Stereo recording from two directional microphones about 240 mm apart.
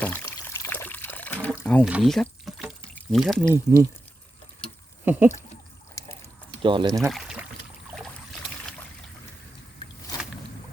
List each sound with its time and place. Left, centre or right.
0.0 s water: centre
1.9 s pour: centre
3.5 s speech: centre
5.0 s a sound: centre
6.6 s speech: right
7.1 s pour: centre